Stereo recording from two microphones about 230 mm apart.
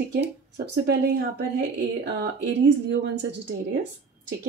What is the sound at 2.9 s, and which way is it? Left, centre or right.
Speech, right.